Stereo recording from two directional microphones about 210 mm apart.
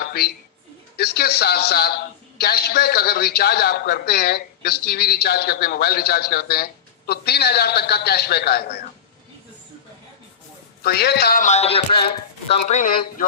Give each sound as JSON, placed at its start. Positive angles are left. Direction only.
{"t": 0.0, "sound": "a sound", "side_deg": 50}
{"t": 0.9, "sound": "a man's voice", "side_deg": 50}
{"t": 10.8, "sound": "a man's voice", "side_deg": 50}